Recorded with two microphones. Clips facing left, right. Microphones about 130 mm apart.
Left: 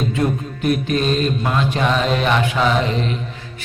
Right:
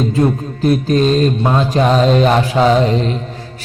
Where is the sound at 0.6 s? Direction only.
35° right (ahead or behind).